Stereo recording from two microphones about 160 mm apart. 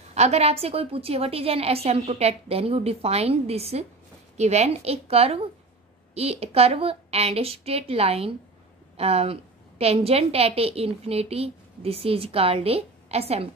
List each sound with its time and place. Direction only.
0.1 s a woman's voice: 40° right (ahead or behind)